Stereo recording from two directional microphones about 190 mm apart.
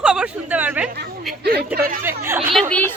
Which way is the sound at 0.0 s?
5° right (ahead or behind).